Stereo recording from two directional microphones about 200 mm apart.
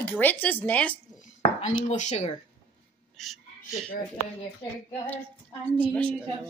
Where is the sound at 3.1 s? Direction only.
Centre (ahead or behind).